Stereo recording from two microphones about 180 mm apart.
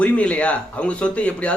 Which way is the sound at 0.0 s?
5° left (ahead or behind).